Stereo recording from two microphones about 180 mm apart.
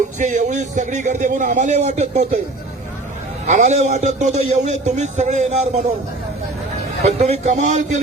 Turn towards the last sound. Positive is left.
turn(degrees=-40)  # may be behind; listen again after turning